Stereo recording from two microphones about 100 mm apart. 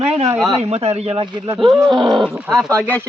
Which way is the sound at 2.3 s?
Centre (ahead or behind).